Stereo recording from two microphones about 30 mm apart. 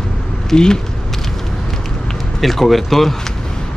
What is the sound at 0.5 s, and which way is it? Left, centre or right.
Speech, left.